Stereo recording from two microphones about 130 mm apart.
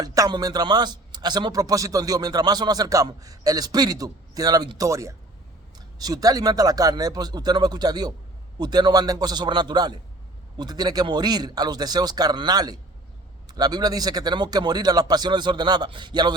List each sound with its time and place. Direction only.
0.0 s a man's voice: 30° right (ahead or behind)